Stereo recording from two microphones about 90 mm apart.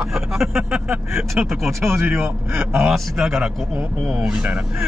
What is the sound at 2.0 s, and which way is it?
Speech, 25° right (ahead or behind).